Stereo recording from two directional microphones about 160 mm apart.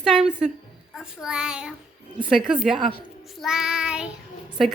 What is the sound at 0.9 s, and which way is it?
A woman's voice, 5° right (ahead or behind).